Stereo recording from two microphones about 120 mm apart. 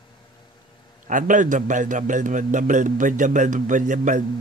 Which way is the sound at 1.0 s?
90° right.